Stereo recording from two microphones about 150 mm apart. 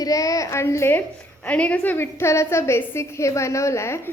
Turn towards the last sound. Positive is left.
turn(degrees=20)  # may be behind; listen again after turning